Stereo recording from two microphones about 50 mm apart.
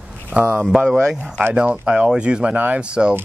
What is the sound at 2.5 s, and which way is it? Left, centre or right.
Speech, right.